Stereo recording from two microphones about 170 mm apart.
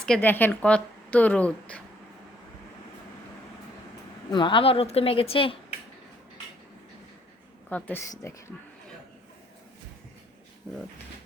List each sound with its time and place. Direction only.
0.0 s speech: 5° left (ahead or behind)
4.3 s a woman's voice: 30° left (ahead or behind)
7.7 s speech: 10° left (ahead or behind)